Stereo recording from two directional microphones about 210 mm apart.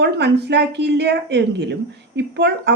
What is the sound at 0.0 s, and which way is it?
Speech, 50° right (ahead or behind).